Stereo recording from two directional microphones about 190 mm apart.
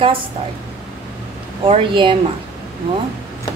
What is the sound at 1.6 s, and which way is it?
Speech, 30° right (ahead or behind).